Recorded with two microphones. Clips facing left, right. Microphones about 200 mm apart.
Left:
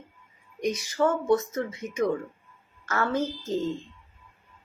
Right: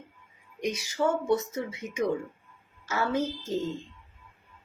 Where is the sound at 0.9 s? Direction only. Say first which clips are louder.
Left 2 dB; 10° right (ahead or behind).